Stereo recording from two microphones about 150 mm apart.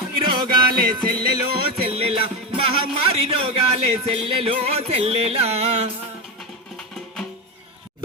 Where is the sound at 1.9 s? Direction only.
40° right (ahead or behind).